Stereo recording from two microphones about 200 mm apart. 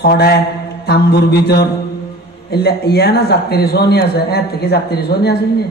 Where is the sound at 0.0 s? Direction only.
50° left (ahead or behind).